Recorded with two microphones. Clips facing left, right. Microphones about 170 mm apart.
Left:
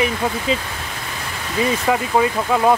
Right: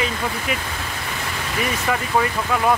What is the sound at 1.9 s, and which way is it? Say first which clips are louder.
Speech: left 2 dB; 20° left (ahead or behind).